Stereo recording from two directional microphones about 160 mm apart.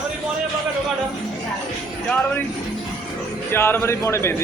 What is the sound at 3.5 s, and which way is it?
Speech, 15° left (ahead or behind).